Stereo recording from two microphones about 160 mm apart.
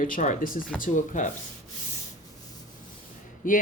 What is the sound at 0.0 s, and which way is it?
Speech, 50° left (ahead or behind).